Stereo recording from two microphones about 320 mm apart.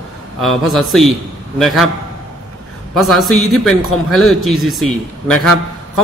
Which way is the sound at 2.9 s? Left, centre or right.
Centre.